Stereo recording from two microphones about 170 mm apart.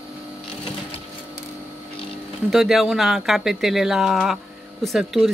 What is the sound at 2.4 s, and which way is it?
Speech, centre (ahead or behind).